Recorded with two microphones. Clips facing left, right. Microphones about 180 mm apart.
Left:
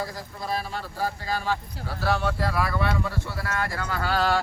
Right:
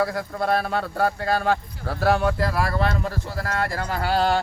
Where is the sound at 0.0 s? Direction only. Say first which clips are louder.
Right 9 dB; 65° right (ahead or behind).